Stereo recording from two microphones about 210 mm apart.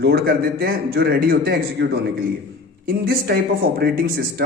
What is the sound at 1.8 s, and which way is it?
Speech, 60° right (ahead or behind).